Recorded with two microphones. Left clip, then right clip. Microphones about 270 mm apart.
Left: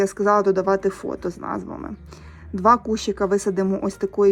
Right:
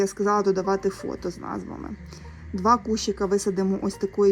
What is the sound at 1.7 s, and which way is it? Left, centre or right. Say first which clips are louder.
Speech: left 4 dB; left.